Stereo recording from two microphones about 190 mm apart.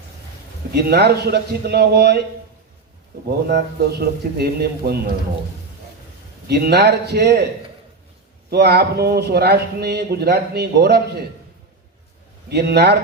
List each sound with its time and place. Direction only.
0.7 s speech: 60° right (ahead or behind)
3.2 s speech: 55° right (ahead or behind)
6.5 s speech: 60° right (ahead or behind)
8.4 s speech: 60° right (ahead or behind)
12.5 s speech: 60° right (ahead or behind)